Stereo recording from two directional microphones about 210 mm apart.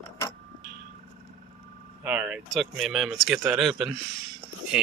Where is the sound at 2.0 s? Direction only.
5° right (ahead or behind).